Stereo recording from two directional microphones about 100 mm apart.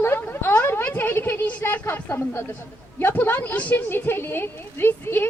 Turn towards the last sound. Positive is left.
turn(degrees=20)  # may be behind; listen again after turning